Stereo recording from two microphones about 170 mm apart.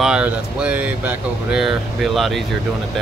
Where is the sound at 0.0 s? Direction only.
5° right (ahead or behind).